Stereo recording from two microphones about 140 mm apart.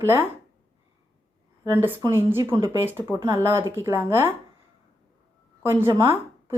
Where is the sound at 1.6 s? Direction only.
15° right (ahead or behind).